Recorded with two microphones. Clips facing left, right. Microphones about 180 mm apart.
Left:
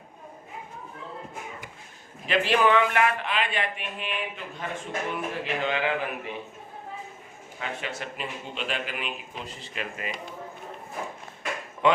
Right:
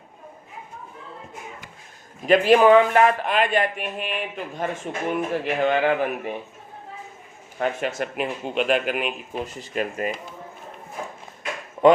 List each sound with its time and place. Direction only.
2.2 s a man's voice: 45° right (ahead or behind)
7.6 s a man's voice: 45° right (ahead or behind)